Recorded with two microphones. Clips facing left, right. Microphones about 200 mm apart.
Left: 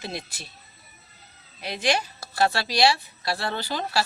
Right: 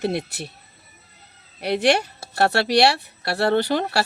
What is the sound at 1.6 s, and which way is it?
Speech, 65° right (ahead or behind).